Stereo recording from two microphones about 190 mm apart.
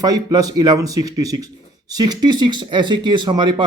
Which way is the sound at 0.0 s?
20° right (ahead or behind).